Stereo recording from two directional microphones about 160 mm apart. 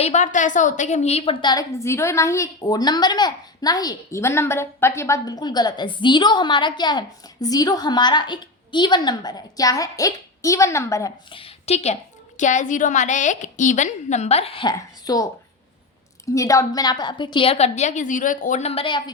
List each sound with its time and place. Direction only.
0.0 s a woman's voice: 45° left (ahead or behind); by 11.1 s 20° left (ahead or behind)
11.3 s a woman's voice: 35° left (ahead or behind)